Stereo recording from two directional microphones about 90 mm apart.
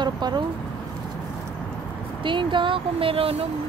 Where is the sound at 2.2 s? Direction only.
65° right (ahead or behind); by 3.5 s 90° right.